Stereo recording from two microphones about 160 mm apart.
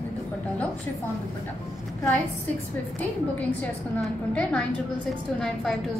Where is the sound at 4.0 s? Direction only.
10° left (ahead or behind).